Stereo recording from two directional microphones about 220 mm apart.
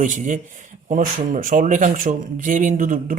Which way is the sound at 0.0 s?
35° right (ahead or behind).